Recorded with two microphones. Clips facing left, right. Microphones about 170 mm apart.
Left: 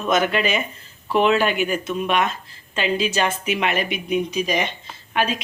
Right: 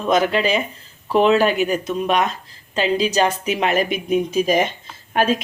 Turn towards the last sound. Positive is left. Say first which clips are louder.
# right 4 dB
turn(degrees=-45)  # may be behind; listen again after turning